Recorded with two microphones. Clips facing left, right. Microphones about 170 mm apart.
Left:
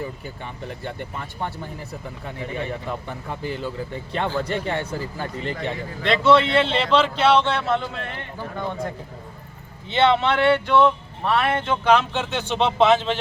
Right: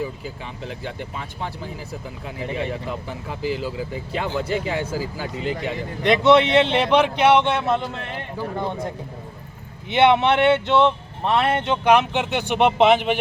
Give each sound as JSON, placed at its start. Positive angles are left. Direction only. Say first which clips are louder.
{"t": 0.9, "sound": "speech", "louder": "even", "side_deg": 0}
{"t": 6.0, "sound": "speech", "louder": "right 2 dB", "side_deg": -20}
{"t": 9.9, "sound": "speech", "louder": "right 3 dB", "side_deg": -20}